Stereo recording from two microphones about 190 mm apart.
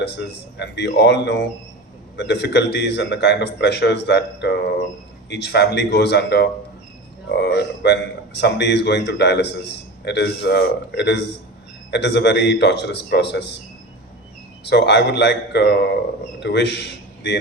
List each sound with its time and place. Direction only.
0.5 s speech: 65° left (ahead or behind)
14.6 s a man's voice: 65° left (ahead or behind)